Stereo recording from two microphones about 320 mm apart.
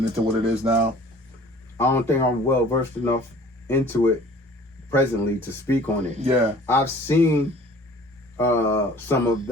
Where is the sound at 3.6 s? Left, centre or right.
Centre.